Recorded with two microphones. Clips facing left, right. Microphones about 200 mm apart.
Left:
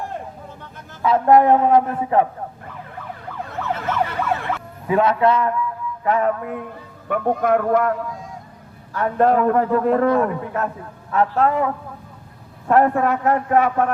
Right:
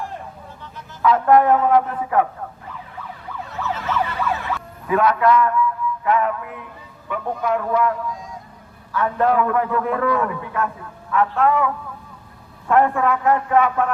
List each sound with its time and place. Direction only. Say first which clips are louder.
1.0 s a man's voice: left 1 dB; 25° left (ahead or behind)
3.5 s emergency vehicle: even; 55° left (ahead or behind)
4.9 s a man's voice: even; 25° left (ahead or behind); by 6.7 s 40° left (ahead or behind)
7.1 s a man's voice: left 4 dB; 55° left (ahead or behind)